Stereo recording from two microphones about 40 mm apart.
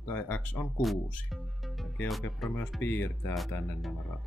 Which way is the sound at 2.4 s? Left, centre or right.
Centre.